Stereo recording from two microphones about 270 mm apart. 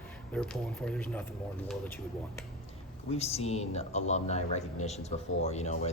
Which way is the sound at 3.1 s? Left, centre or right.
Left.